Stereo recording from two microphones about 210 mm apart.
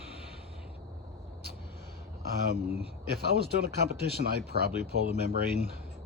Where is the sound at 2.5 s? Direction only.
35° left (ahead or behind).